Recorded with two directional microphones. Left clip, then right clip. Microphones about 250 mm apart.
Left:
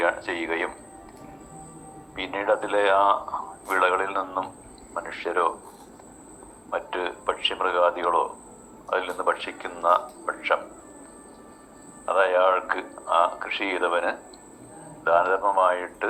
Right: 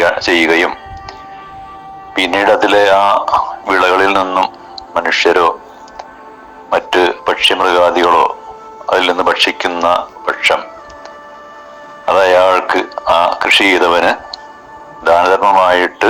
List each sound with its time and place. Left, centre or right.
0.0 s music: right
2.1 s speech: right
6.7 s speech: right
12.0 s speech: right